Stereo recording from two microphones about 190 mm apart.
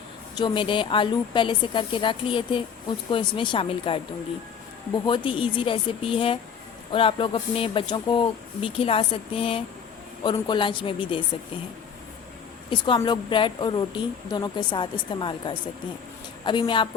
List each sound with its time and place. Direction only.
0.3 s speech: 25° left (ahead or behind)
5.0 s speech: 25° left (ahead or behind)
12.7 s speech: 25° left (ahead or behind)